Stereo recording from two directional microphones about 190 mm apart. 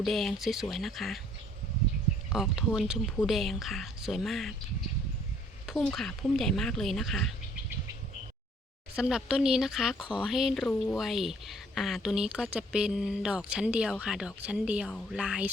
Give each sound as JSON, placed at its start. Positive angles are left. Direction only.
{"t": 0.0, "sound": "speech", "side_deg": 0}
{"t": 2.3, "sound": "speech", "side_deg": 0}
{"t": 5.6, "sound": "speech", "side_deg": 0}
{"t": 9.0, "sound": "speech", "side_deg": -5}